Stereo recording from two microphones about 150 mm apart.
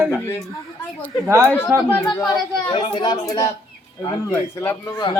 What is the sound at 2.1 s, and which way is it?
Speech, 25° left (ahead or behind).